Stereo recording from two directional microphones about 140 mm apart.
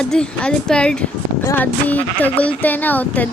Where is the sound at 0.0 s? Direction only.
5° left (ahead or behind).